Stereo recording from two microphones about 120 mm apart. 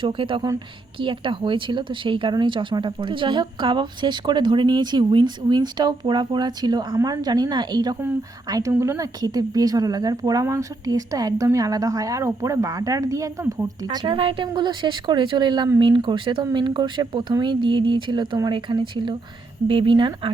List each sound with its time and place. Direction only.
0.0 s speech: 45° right (ahead or behind)
14.0 s speech: 50° right (ahead or behind)